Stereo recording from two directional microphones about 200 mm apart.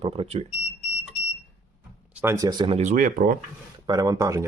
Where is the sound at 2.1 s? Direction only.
10° right (ahead or behind).